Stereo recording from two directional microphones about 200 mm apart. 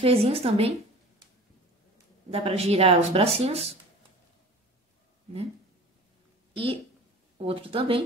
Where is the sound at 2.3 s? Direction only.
30° right (ahead or behind).